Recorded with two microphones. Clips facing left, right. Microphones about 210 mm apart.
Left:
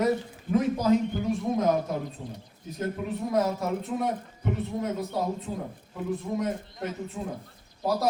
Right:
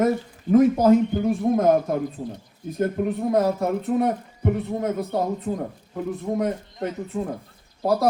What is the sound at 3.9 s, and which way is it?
Speech, 60° right (ahead or behind).